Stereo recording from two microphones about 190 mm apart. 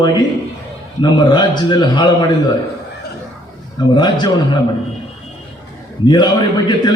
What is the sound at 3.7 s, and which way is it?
Speech, 20° left (ahead or behind).